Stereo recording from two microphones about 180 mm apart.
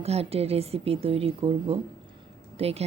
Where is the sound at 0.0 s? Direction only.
35° right (ahead or behind).